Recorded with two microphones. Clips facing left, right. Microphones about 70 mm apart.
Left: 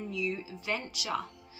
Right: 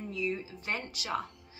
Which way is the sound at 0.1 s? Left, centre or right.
Right.